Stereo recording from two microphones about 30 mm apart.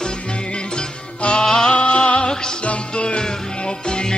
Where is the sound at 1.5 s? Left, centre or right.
Left.